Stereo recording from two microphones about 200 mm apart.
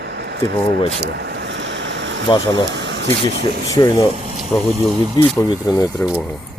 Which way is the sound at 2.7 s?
60° right (ahead or behind).